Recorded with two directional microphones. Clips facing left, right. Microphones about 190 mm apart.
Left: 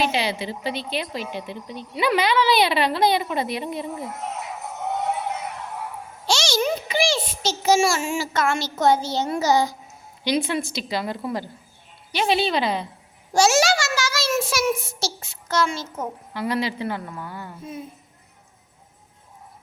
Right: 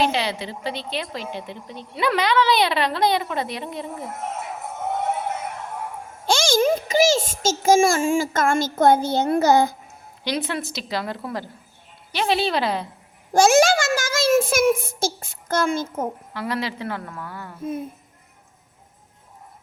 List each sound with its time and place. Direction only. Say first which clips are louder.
0.1 s a woman's voice: even; 5° left (ahead or behind)
4.1 s music: right 1 dB; 50° right (ahead or behind)
6.2 s a child's voice: right 4 dB; 50° right (ahead or behind)
10.5 s a woman's voice: left 2 dB; centre (ahead or behind)
13.3 s a child's voice: right 3 dB; 55° right (ahead or behind)
16.3 s a woman's voice: left 2 dB; centre (ahead or behind)